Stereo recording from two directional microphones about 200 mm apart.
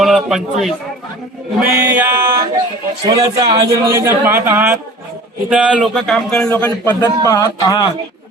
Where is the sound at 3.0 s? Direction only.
25° right (ahead or behind); by 7.8 s 15° left (ahead or behind).